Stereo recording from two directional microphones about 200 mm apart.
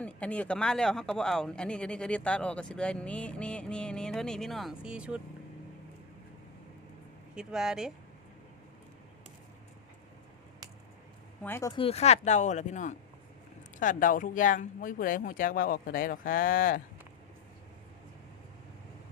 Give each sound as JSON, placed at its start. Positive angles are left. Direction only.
{"t": 0.0, "sound": "speech", "side_deg": 5}
{"t": 7.3, "sound": "speech", "side_deg": -5}
{"t": 11.4, "sound": "speech", "side_deg": 10}
{"t": 11.7, "sound": "speech", "side_deg": 30}